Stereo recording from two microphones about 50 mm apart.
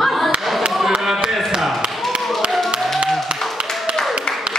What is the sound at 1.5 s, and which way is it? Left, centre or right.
Basketball bounce, centre.